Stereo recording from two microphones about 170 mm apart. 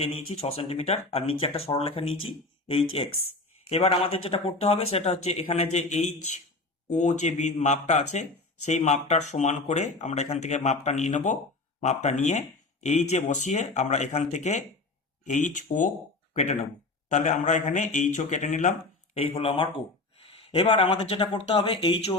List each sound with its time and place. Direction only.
0.0 s speech: 35° left (ahead or behind)
19.1 s speech: 35° left (ahead or behind)